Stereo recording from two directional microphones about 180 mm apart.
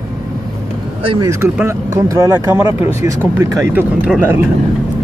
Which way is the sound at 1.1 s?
20° right (ahead or behind).